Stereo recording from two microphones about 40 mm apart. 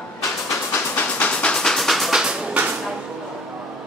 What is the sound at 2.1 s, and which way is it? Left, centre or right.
Music, centre.